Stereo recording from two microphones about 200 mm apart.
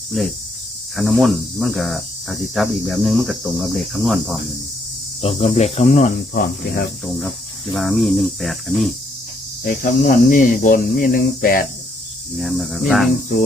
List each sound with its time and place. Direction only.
0.9 s cricket: centre (ahead or behind)
5.2 s speech: 30° left (ahead or behind)
7.7 s cricket: centre (ahead or behind)
9.6 s speech: 45° left (ahead or behind)
12.4 s cricket: centre (ahead or behind)